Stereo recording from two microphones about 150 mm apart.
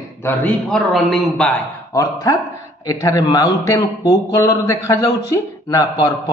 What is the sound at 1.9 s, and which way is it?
Speech, 25° left (ahead or behind).